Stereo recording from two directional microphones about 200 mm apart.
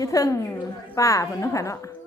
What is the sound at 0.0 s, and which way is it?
A woman's voice, 15° left (ahead or behind).